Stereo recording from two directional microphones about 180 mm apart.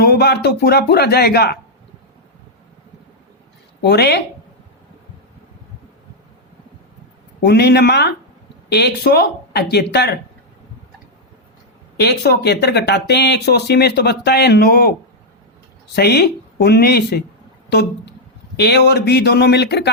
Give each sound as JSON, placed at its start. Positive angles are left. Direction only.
{"t": 0.0, "sound": "speech", "side_deg": 60}
{"t": 3.8, "sound": "speech", "side_deg": 65}
{"t": 7.4, "sound": "speech", "side_deg": 65}
{"t": 11.9, "sound": "speech", "side_deg": 65}
{"t": 16.0, "sound": "speech", "side_deg": 65}